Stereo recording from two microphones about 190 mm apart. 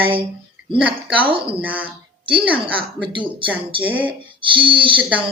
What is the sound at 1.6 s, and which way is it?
Speech, 10° right (ahead or behind).